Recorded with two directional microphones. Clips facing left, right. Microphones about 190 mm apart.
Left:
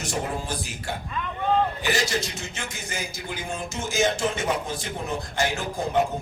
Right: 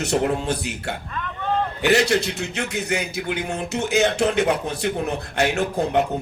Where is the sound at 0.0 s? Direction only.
65° right (ahead or behind).